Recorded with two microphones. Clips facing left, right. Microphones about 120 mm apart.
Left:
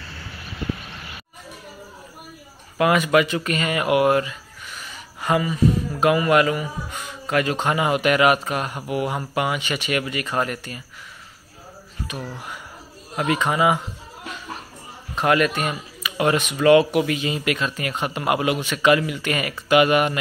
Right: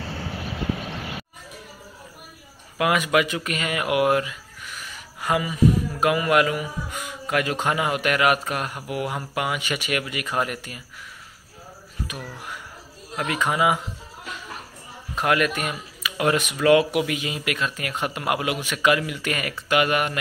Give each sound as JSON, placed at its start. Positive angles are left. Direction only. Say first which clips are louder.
{"t": 0.0, "sound": "a sound", "louder": "right 7 dB", "side_deg": -90}
{"t": 2.8, "sound": "speech", "louder": "left 3 dB", "side_deg": -5}
{"t": 12.1, "sound": "speech", "louder": "left 3 dB", "side_deg": 0}
{"t": 15.1, "sound": "speech", "louder": "left 3 dB", "side_deg": 0}